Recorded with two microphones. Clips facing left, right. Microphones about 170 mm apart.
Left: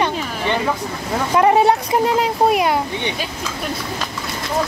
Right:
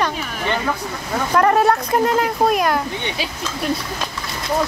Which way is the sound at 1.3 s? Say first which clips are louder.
Left 1 dB; 15° left (ahead or behind).